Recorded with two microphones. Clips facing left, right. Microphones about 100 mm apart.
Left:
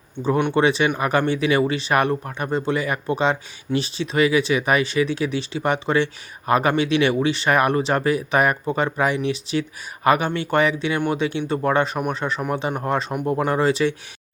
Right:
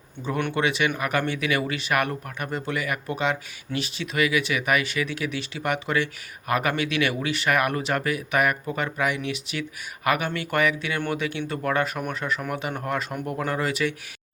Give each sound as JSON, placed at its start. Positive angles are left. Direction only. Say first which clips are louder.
{"t": 0.2, "sound": "speech", "louder": "left 7 dB", "side_deg": 30}